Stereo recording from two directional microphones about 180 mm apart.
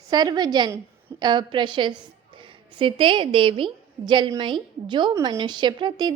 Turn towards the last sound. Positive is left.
turn(degrees=-25)  # may be behind; listen again after turning